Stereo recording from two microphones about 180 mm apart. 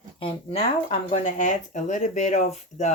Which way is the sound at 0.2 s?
35° left (ahead or behind).